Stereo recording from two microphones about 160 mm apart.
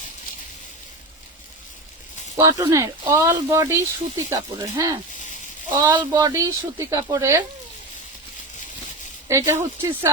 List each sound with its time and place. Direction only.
2.3 s speech: 25° right (ahead or behind)
9.3 s speech: 15° right (ahead or behind)